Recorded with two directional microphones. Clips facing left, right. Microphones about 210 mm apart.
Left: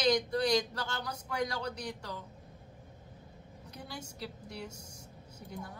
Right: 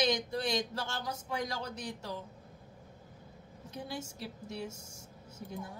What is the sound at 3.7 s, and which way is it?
Speech, 25° right (ahead or behind).